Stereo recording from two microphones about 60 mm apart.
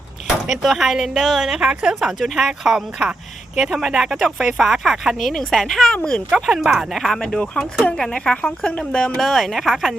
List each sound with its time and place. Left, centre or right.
0.4 s speech: centre
6.0 s speech: centre
6.4 s a woman's voice: centre
9.1 s speech: centre